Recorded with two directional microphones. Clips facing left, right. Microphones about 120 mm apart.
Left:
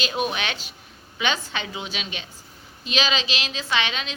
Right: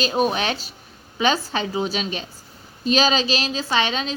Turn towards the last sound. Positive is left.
turn(degrees=-35)  # may be behind; listen again after turning